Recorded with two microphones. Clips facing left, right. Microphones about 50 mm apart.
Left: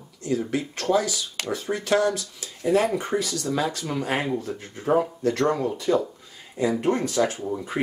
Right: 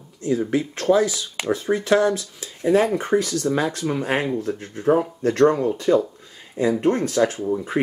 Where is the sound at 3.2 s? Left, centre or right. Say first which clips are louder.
Right 4 dB; right.